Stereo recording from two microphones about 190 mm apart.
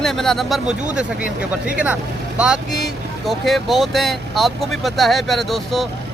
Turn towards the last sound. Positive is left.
turn(degrees=0)  # may be behind; listen again after turning